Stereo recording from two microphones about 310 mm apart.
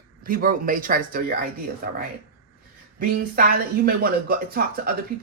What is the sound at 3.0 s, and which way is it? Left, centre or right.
Speech, right.